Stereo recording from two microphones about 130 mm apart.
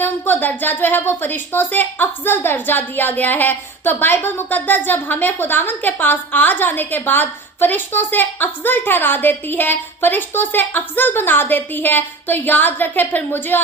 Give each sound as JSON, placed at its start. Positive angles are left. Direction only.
{"t": 0.0, "sound": "a woman's voice", "side_deg": 15}